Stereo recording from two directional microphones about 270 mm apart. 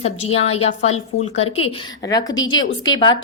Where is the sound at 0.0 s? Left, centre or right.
Left.